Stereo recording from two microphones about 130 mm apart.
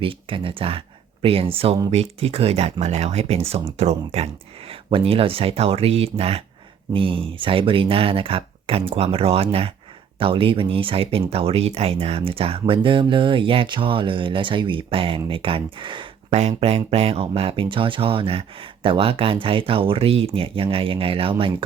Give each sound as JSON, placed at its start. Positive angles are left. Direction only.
{"t": 0.0, "sound": "speech", "side_deg": -45}
{"t": 16.3, "sound": "speech", "side_deg": -60}